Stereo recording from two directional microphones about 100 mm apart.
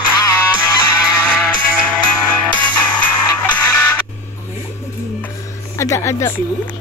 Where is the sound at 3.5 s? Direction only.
15° left (ahead or behind).